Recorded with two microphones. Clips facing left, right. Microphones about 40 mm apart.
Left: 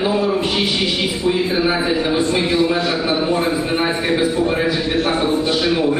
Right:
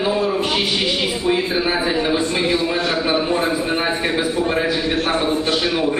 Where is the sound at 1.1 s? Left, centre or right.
Centre.